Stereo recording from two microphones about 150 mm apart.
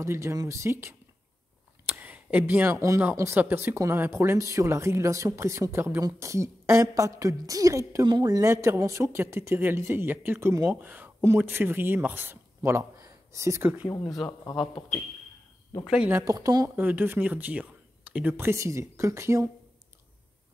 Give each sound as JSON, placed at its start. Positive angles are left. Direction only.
{"t": 0.0, "sound": "speech", "side_deg": -20}
{"t": 13.8, "sound": "speech", "side_deg": 20}
{"t": 15.9, "sound": "speech", "side_deg": -5}
{"t": 16.2, "sound": "speech", "side_deg": -25}